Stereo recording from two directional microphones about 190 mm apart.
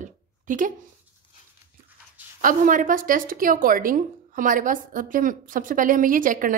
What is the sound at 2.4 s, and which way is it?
A woman's voice, 45° right (ahead or behind).